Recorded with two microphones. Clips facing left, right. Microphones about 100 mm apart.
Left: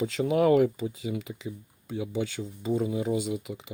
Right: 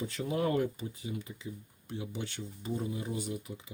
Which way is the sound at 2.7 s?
90° left.